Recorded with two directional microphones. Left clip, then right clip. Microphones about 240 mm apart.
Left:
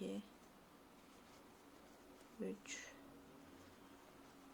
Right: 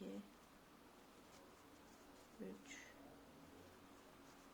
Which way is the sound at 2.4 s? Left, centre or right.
Left.